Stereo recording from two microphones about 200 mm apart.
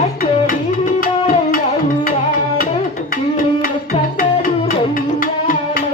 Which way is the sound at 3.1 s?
45° left (ahead or behind).